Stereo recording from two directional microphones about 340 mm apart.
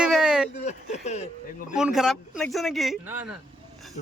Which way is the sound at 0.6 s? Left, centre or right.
Centre.